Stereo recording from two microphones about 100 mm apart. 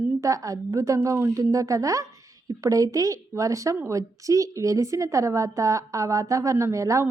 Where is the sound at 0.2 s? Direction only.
35° right (ahead or behind).